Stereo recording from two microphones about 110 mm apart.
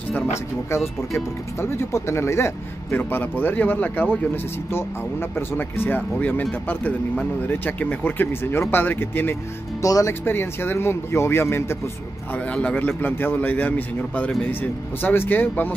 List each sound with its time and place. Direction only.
0.1 s speech: 25° left (ahead or behind)
5.3 s speech: 20° left (ahead or behind)
7.4 s speech: 15° left (ahead or behind)
10.2 s speech: 20° left (ahead or behind)